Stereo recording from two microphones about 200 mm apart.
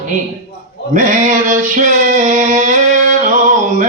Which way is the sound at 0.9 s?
40° right (ahead or behind).